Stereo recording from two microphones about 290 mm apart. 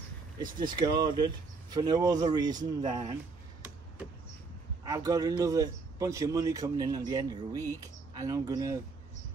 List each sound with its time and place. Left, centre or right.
0.4 s a man's voice: centre
4.8 s a man's voice: centre